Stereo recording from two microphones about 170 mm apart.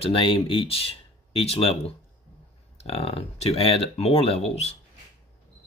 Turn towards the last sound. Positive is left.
turn(degrees=40)  # may be behind; listen again after turning